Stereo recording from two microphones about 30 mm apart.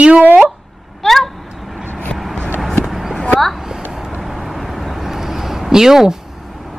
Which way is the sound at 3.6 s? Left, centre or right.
Centre.